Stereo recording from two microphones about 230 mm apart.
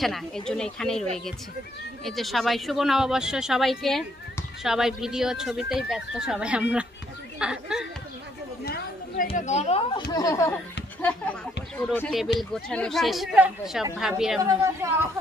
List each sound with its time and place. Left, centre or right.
0.0 s speech: centre
2.0 s speech: centre
8.6 s chatter: left
9.3 s a woman's voice: left
10.1 s speech: centre
14.4 s a woman's voice: centre